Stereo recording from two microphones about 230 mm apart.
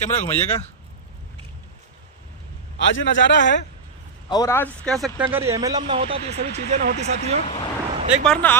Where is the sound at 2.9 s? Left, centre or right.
Left.